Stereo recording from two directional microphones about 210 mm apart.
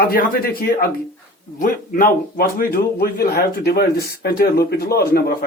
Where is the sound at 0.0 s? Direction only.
45° left (ahead or behind).